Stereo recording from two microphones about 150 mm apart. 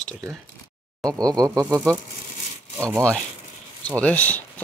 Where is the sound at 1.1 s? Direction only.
25° right (ahead or behind).